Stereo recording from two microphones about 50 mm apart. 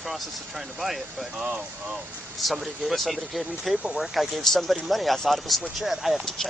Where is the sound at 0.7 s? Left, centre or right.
Centre.